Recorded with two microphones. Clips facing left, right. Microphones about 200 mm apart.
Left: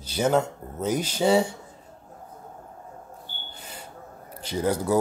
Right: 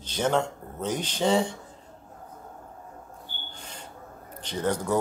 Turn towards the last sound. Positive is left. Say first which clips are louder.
# left 3 dB
turn(degrees=10)  # may be behind; listen again after turning